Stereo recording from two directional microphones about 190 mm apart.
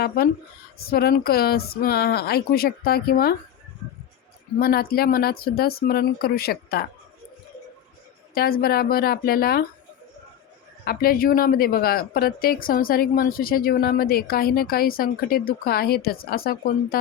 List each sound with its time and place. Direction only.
0.2 s speech: 55° left (ahead or behind)
4.6 s speech: 50° left (ahead or behind)
8.4 s speech: 50° left (ahead or behind)
10.8 s speech: 50° left (ahead or behind)